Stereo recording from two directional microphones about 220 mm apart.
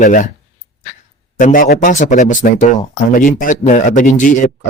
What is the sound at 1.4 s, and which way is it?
Speech, 35° left (ahead or behind).